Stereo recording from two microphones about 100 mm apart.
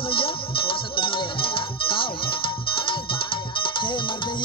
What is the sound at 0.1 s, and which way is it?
Music, 60° left (ahead or behind).